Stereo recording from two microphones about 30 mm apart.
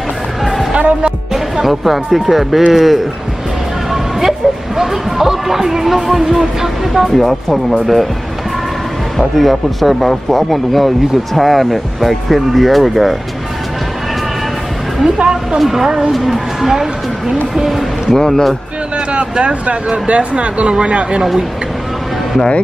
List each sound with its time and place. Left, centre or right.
1.3 s speech: centre
6.9 s speech: centre
9.4 s speech: centre
15.6 s speech: centre
18.1 s speech: centre
19.1 s speech: right